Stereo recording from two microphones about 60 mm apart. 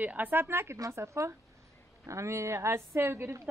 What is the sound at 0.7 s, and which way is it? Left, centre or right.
Speech, right.